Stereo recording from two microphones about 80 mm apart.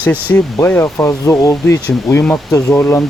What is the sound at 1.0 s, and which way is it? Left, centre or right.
Speech, left.